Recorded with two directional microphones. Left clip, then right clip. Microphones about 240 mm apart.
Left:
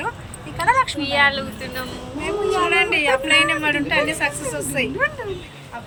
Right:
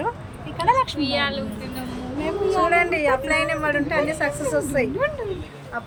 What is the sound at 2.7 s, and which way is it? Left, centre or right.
Speech, centre.